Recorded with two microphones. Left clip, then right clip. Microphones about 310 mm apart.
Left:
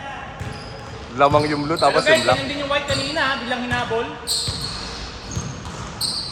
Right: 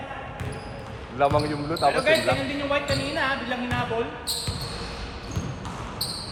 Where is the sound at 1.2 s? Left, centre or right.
Left.